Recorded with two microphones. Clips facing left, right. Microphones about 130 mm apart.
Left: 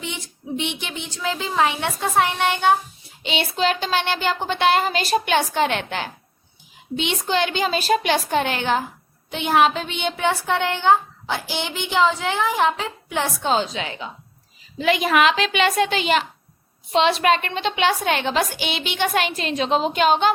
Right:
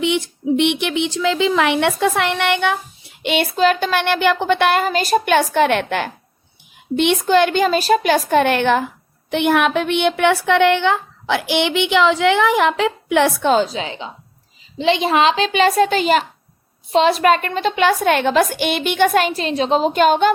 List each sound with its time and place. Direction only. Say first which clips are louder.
0.0 s speech: right 14 dB; 70° right (ahead or behind)
3.2 s a woman's voice: right 6 dB; 45° right (ahead or behind)
13.7 s a child's voice: right 3 dB; 30° right (ahead or behind); by 20.3 s 50° right (ahead or behind)